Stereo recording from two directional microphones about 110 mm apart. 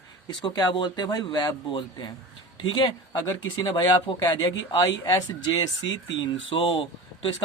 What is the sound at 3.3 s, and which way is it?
A man's voice, 40° left (ahead or behind).